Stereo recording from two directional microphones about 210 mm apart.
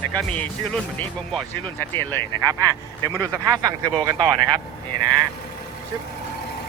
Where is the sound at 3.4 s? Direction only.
15° right (ahead or behind).